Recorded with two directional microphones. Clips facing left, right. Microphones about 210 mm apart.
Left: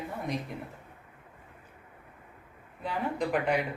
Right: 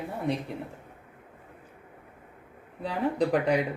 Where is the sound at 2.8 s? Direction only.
35° right (ahead or behind).